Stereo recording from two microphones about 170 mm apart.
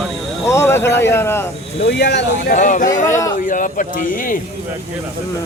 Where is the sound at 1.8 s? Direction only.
90° left.